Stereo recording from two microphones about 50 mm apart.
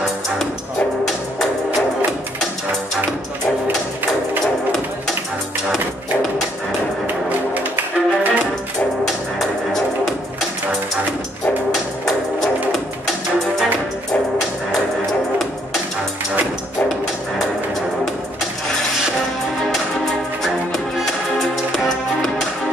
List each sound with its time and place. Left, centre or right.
7.2 s music: right
9.0 s music: centre
20.7 s music: centre